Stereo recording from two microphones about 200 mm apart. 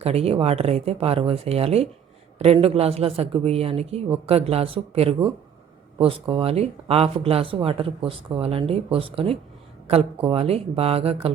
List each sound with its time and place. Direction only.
0.0 s speech: 30° right (ahead or behind)